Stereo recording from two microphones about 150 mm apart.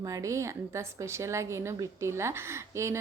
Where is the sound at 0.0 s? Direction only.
20° right (ahead or behind).